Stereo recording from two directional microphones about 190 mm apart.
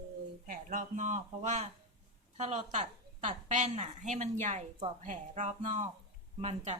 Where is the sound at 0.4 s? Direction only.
45° right (ahead or behind).